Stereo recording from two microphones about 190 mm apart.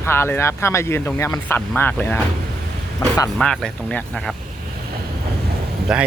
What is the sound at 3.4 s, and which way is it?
Speech, 5° left (ahead or behind).